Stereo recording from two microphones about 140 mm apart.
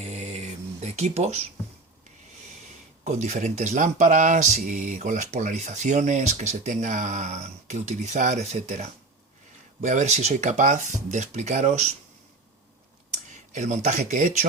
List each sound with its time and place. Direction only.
0.0 s a sound: 50° right (ahead or behind)
3.0 s speech: 55° right (ahead or behind)
13.3 s speech: 60° right (ahead or behind)